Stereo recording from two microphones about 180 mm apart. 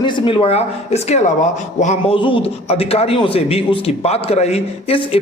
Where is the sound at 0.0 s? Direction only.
30° left (ahead or behind).